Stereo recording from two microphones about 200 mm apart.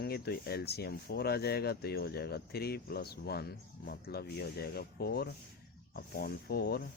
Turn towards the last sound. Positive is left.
turn(degrees=50)  # may be behind; listen again after turning